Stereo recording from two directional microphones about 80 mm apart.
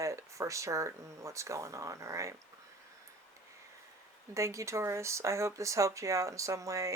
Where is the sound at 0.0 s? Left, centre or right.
Right.